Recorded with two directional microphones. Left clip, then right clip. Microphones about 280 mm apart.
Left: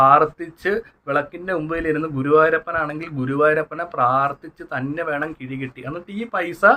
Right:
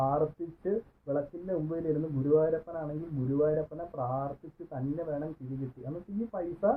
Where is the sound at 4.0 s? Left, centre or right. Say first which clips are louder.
Left 17 dB; left.